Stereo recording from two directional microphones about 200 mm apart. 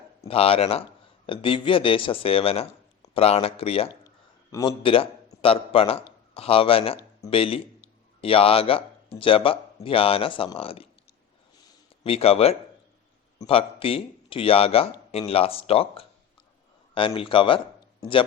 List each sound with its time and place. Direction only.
0.2 s a man's voice: 30° left (ahead or behind)
12.0 s speech: 30° left (ahead or behind)